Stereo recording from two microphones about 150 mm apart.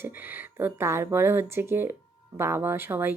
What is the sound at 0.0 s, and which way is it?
Speech, 15° right (ahead or behind).